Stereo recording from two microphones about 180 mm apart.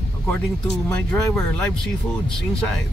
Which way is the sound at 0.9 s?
5° left (ahead or behind).